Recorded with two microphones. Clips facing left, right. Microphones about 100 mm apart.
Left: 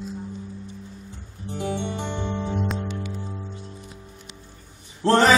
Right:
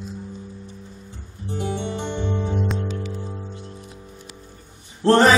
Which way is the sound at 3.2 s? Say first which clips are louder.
Right 2 dB; 10° right (ahead or behind).